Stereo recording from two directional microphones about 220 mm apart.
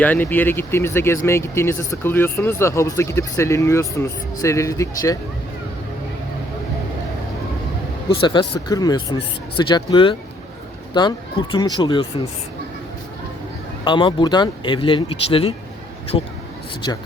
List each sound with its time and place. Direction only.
0.0 s speech: 5° left (ahead or behind)
8.2 s speech: 20° left (ahead or behind)
13.8 s speech: 20° left (ahead or behind)